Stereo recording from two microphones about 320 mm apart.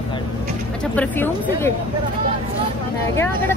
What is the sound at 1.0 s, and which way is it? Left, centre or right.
Speech, centre.